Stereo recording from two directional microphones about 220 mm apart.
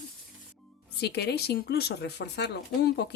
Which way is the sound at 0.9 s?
45° left (ahead or behind).